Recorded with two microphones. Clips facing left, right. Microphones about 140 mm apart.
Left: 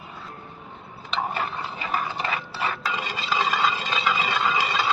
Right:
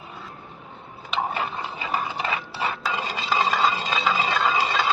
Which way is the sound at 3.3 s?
25° right (ahead or behind).